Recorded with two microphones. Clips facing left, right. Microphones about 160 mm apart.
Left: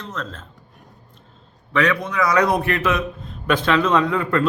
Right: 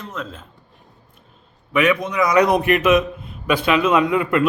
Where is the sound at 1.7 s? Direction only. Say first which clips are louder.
Right 2 dB; 15° right (ahead or behind).